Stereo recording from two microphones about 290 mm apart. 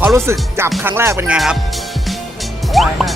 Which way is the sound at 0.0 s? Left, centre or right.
Centre.